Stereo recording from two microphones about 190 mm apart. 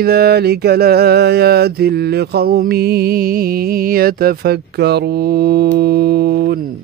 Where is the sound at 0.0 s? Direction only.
55° right (ahead or behind).